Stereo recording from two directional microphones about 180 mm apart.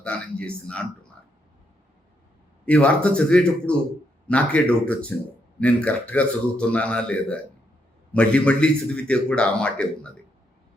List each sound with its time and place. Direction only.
0.0 s a man's voice: 5° left (ahead or behind)
2.6 s a man's voice: 5° left (ahead or behind)